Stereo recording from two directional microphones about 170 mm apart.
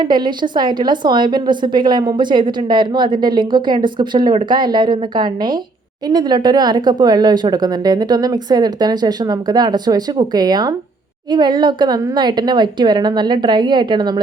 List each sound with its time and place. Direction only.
0.0 s a woman's voice: 25° right (ahead or behind)